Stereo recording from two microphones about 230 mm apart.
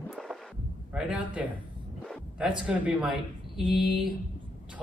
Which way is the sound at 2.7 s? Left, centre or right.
Centre.